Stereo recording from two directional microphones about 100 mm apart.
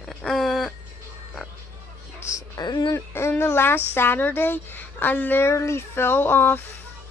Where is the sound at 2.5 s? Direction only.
45° left (ahead or behind).